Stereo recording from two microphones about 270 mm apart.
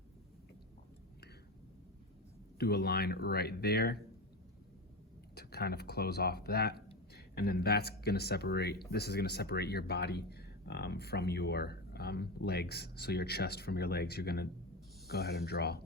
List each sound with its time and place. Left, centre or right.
2.6 s speech: left
5.3 s speech: left